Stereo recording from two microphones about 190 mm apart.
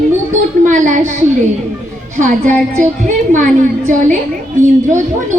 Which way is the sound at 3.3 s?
40° right (ahead or behind).